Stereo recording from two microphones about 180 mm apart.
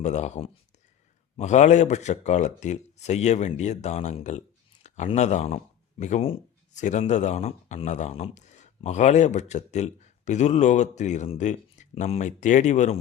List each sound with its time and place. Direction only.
0.0 s speech: 40° left (ahead or behind)